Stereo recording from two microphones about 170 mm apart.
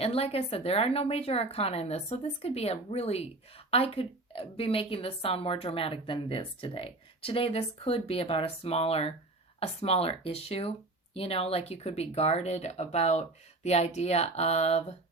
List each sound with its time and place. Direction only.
0.0 s a woman's voice: 35° left (ahead or behind)